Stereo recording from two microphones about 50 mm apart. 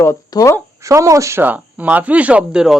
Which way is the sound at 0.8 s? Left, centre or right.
Right.